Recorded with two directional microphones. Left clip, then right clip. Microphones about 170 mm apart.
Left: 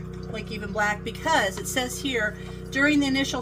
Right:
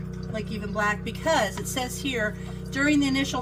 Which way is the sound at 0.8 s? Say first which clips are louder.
Left 1 dB; 40° left (ahead or behind).